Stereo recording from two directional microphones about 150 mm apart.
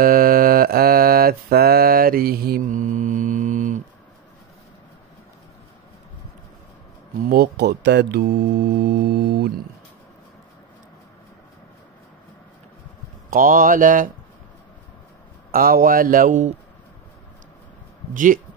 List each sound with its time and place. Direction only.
0.0 s mantra: 70° right (ahead or behind)
7.2 s speech: 90° right
13.3 s mantra: 70° right (ahead or behind)
15.5 s speech: 70° right (ahead or behind)
18.1 s mantra: 65° right (ahead or behind)